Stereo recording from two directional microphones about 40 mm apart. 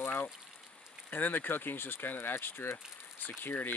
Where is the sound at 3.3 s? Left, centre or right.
Left.